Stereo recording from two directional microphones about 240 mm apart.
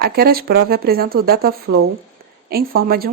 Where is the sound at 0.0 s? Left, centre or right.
Right.